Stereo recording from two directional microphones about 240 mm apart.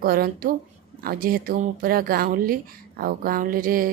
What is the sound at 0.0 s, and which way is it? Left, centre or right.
A woman's voice, right.